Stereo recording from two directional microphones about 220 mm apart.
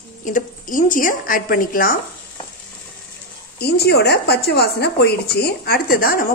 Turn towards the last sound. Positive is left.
turn(degrees=40)  # may be behind; listen again after turning